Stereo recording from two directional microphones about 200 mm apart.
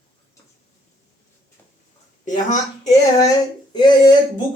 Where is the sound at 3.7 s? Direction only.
20° left (ahead or behind).